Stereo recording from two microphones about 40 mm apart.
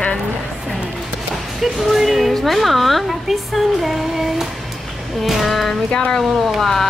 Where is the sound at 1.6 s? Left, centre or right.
Centre.